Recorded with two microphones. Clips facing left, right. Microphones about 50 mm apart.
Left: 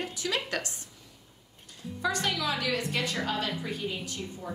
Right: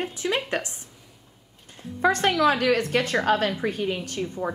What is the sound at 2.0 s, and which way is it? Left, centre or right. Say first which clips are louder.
A woman's voice: right 10 dB; right.